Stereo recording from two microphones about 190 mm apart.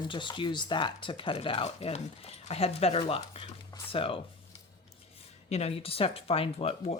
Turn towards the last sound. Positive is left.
turn(degrees=35)  # may be behind; listen again after turning